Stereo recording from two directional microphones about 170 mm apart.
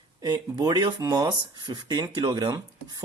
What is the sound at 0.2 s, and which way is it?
Speech, 25° right (ahead or behind).